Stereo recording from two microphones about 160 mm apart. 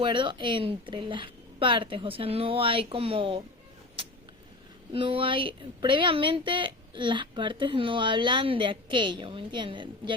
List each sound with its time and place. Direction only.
0.0 s a woman's voice: 30° right (ahead or behind)
4.0 s vehicle: 35° right (ahead or behind)
4.9 s a woman's voice: 35° right (ahead or behind)